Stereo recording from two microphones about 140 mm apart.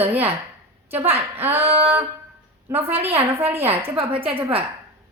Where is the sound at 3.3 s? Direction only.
15° right (ahead or behind).